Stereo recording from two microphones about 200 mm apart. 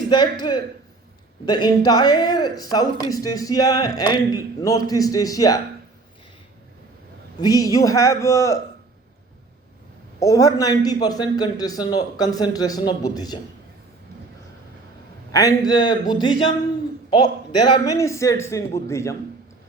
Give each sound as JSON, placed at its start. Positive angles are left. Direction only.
{"t": 0.1, "sound": "speech", "side_deg": 20}
{"t": 7.3, "sound": "speech", "side_deg": 20}
{"t": 10.2, "sound": "speech", "side_deg": 15}
{"t": 15.3, "sound": "speech", "side_deg": 15}
{"t": 17.7, "sound": "speech", "side_deg": 15}